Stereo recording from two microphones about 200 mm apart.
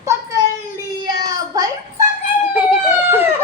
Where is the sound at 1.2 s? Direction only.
15° right (ahead or behind).